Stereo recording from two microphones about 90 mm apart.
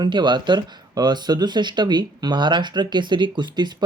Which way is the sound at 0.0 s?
55° right (ahead or behind).